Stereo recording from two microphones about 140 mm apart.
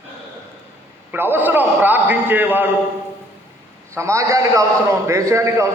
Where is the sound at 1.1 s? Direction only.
15° right (ahead or behind).